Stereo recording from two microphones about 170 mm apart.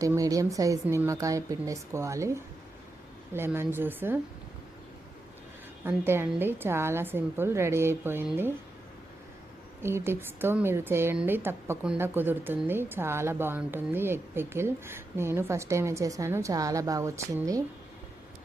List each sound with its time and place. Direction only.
0.0 s a woman's voice: 20° right (ahead or behind)
5.8 s a woman's voice: 15° right (ahead or behind)
9.8 s a woman's voice: 15° right (ahead or behind)